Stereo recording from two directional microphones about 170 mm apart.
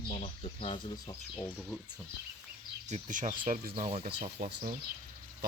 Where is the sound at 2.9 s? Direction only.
45° right (ahead or behind).